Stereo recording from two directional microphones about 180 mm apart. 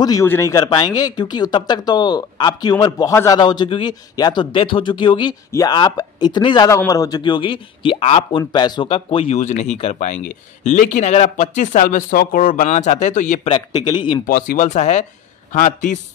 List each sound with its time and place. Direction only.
0.0 s speech: 20° left (ahead or behind)
14.2 s speech: 50° left (ahead or behind)